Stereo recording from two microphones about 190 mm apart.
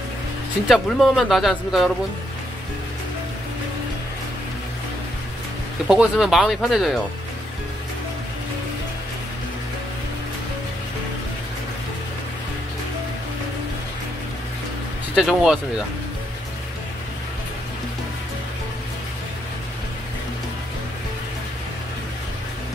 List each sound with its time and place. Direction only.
0.7 s speech: centre (ahead or behind)
5.9 s speech: centre (ahead or behind)
15.1 s speech: centre (ahead or behind)